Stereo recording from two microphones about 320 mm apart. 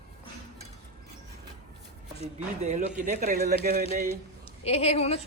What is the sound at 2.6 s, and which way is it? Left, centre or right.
A man's voice, right.